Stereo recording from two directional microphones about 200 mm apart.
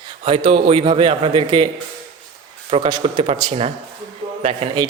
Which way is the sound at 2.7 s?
25° right (ahead or behind).